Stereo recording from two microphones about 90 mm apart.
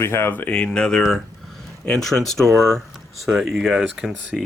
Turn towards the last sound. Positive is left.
turn(degrees=-5)  # may be behind; listen again after turning